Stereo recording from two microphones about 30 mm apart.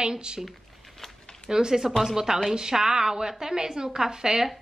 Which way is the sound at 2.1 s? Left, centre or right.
Centre.